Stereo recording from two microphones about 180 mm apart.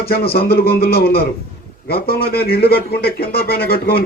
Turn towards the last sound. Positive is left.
turn(degrees=60)  # may be behind; listen again after turning